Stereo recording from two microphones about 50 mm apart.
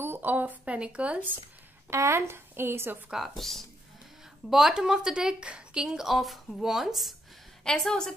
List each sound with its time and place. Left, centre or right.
0.0 s a woman's voice: right
0.7 s speech: right
1.9 s speech: right
3.3 s speech: centre
4.5 s speech: centre; by 5.9 s right
5.9 s speech: centre
7.6 s a woman's voice: centre